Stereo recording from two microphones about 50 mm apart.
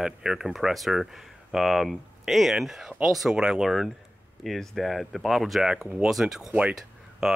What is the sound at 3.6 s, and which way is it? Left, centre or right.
Speech, centre.